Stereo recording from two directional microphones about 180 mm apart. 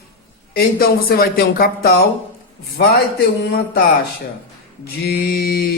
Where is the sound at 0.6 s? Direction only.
55° left (ahead or behind).